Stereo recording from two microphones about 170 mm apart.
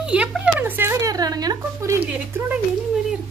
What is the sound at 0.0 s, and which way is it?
Speech, 5° right (ahead or behind).